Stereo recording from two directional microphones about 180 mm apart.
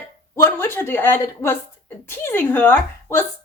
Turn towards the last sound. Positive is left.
turn(degrees=10)  # may be behind; listen again after turning